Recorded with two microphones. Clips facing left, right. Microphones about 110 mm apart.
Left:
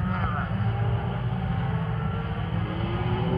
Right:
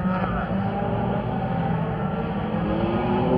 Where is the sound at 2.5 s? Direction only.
65° right (ahead or behind).